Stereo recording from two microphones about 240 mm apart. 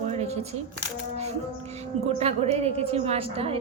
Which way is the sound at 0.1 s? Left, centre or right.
Right.